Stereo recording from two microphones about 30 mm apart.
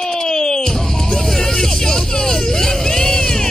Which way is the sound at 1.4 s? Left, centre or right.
Centre.